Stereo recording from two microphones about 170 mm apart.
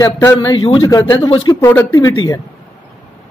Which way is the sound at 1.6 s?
15° left (ahead or behind).